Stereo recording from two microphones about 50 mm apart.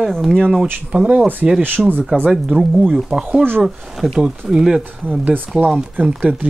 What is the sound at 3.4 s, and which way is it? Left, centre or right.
Speech, right.